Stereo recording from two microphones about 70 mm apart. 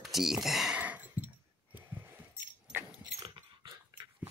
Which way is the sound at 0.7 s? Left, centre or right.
Right.